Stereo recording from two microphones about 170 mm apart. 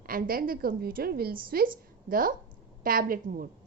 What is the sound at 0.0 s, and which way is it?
A woman's voice, 60° right (ahead or behind).